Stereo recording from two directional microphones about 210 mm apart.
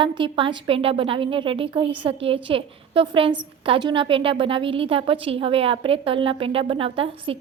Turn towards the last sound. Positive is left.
turn(degrees=-25)  # may be behind; listen again after turning